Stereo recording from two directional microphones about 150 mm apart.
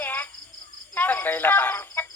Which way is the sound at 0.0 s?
15° left (ahead or behind).